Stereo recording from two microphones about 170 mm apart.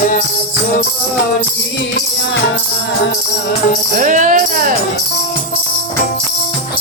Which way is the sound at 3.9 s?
50° right (ahead or behind).